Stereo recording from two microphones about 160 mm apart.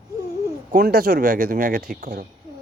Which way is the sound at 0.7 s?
70° right (ahead or behind).